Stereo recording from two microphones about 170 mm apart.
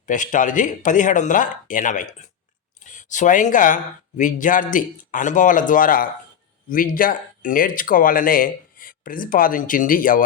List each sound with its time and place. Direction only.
0.0 s speech: 50° left (ahead or behind)